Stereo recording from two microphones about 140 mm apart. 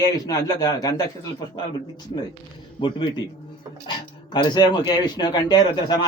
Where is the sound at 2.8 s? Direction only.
35° left (ahead or behind).